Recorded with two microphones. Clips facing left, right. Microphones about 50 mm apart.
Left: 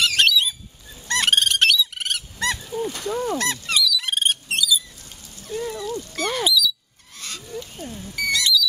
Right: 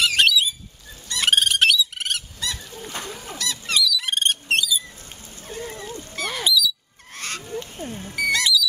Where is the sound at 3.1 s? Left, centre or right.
Left.